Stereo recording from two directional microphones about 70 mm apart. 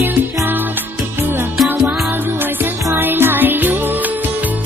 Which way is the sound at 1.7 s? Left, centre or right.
Right.